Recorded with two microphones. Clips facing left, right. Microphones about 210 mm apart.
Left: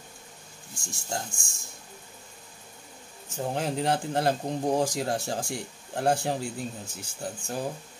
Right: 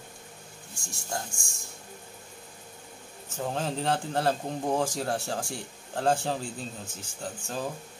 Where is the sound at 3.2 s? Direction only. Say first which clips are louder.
Left 2 dB; 15° left (ahead or behind).